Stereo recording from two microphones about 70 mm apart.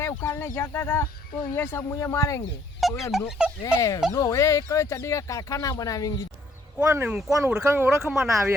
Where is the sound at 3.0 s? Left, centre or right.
Centre.